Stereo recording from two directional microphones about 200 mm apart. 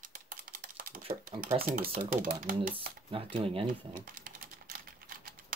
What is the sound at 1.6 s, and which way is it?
Speech, 45° right (ahead or behind).